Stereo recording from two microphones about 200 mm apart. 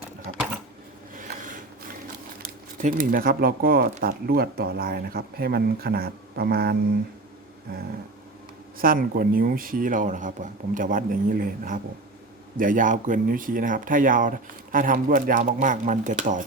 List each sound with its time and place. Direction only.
0.3 s typewriter: 50° right (ahead or behind)
2.4 s speech: 45° right (ahead or behind)